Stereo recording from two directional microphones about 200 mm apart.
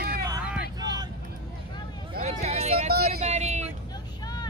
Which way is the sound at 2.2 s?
30° right (ahead or behind).